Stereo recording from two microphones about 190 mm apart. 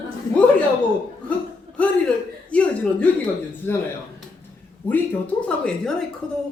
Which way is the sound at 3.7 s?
10° left (ahead or behind).